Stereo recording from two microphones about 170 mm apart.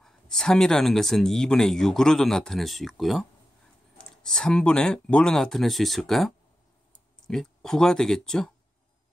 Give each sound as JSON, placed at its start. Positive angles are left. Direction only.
{"t": 0.0, "sound": "speech", "side_deg": 5}